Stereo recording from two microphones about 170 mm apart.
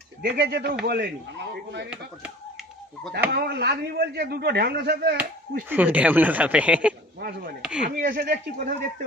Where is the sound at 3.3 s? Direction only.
70° right (ahead or behind).